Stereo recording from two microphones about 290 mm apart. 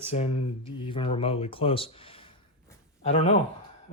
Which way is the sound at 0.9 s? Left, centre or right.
Centre.